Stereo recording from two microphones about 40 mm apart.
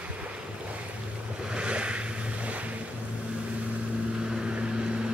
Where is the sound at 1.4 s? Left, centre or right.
Right.